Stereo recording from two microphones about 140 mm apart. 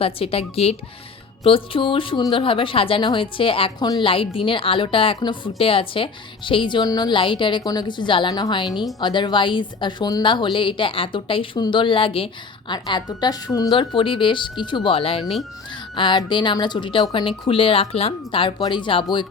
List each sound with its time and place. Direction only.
0.0 s a woman's voice: 45° left (ahead or behind)
3.8 s a woman's voice: 30° left (ahead or behind)
4.1 s a woman's voice: 40° left (ahead or behind)
8.7 s a woman's voice: centre (ahead or behind)
9.0 s a woman's voice: 35° left (ahead or behind)
15.2 s a woman's voice: centre (ahead or behind)
16.0 s a woman's voice: 35° left (ahead or behind)